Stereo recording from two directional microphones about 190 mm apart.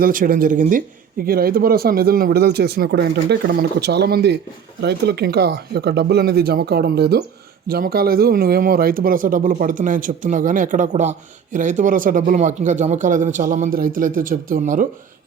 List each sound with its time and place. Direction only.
0.0 s speech: 50° right (ahead or behind)